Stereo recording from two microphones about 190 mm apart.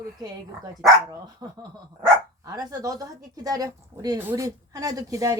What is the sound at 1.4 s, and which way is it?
Speech, 20° right (ahead or behind).